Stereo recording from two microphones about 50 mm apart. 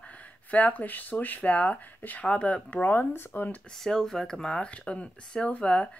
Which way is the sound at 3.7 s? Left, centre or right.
Centre.